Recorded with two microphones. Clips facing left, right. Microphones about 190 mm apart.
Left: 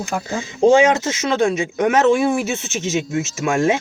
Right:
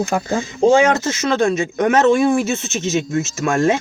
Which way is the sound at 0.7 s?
15° left (ahead or behind).